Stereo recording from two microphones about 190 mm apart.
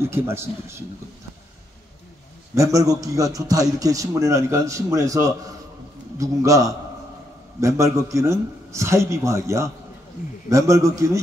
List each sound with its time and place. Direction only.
0.0 s a man's voice: 10° right (ahead or behind)
2.5 s a man's voice: 15° right (ahead or behind)